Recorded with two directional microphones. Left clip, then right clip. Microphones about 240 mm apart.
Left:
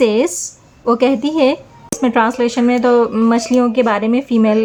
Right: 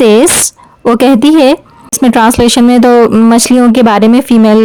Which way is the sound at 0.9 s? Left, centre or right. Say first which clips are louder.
Right 8 dB; right.